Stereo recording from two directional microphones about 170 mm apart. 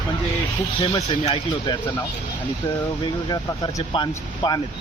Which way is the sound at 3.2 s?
20° left (ahead or behind).